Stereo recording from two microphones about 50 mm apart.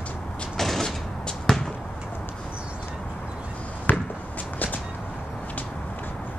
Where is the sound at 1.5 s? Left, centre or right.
Centre.